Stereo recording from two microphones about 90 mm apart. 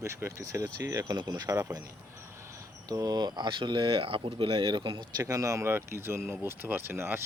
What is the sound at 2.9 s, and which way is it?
Speech, 45° right (ahead or behind).